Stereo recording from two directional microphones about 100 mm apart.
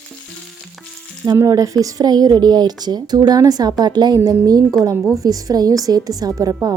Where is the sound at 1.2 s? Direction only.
35° right (ahead or behind).